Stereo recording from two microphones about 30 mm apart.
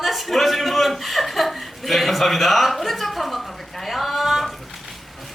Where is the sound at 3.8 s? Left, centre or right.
Centre.